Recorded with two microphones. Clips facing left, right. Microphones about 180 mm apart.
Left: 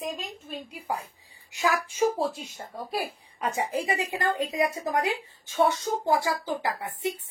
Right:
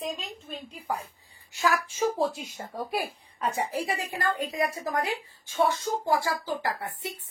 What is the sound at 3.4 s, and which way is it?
A woman's voice, 15° left (ahead or behind).